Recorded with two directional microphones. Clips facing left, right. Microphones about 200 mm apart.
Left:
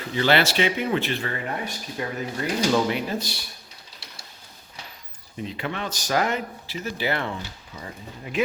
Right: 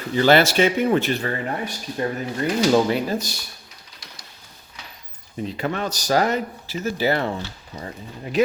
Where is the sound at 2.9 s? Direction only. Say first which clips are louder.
Right 4 dB; 40° right (ahead or behind).